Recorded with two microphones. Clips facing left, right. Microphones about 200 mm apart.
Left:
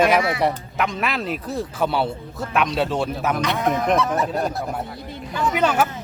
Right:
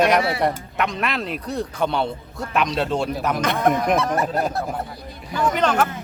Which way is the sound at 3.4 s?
50° right (ahead or behind).